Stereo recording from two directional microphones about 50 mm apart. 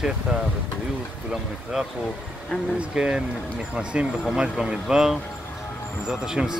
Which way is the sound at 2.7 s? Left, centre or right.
Centre.